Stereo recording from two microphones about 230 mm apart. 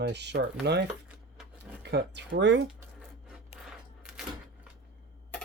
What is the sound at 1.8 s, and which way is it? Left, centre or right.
Speech, right.